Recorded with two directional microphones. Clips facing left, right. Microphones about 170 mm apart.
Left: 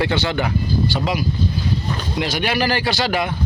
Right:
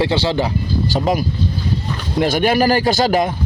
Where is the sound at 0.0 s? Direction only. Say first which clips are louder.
Right 3 dB; 30° right (ahead or behind).